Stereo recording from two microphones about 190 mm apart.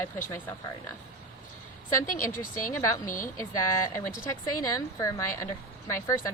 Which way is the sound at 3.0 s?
45° left (ahead or behind).